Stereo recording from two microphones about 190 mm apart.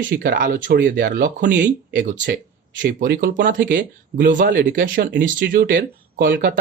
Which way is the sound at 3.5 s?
45° right (ahead or behind).